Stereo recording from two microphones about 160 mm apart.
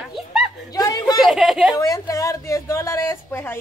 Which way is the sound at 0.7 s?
25° left (ahead or behind).